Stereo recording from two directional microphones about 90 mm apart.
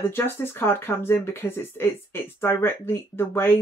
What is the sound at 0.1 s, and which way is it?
Speech, 25° left (ahead or behind).